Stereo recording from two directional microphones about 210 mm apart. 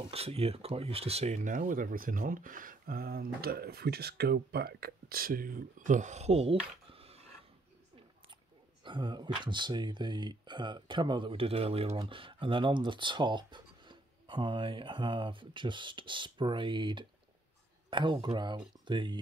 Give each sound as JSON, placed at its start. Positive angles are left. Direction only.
{"t": 0.1, "sound": "speech", "side_deg": -30}
{"t": 8.8, "sound": "speech", "side_deg": -20}